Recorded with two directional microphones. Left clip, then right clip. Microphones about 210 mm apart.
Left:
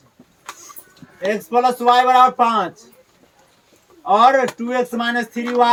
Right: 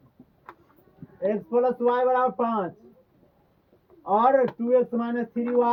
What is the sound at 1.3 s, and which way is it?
Speech, 5° left (ahead or behind).